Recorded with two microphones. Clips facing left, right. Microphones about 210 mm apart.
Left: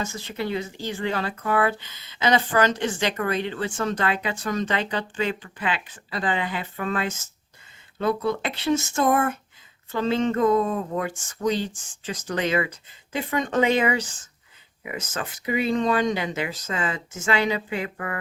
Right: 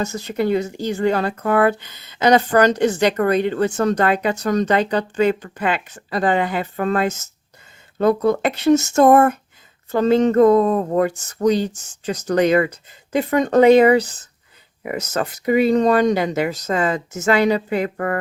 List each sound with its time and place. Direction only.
0.0 s speech: 40° right (ahead or behind)